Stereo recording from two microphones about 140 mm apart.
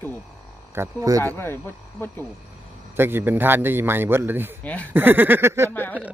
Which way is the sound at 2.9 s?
15° right (ahead or behind).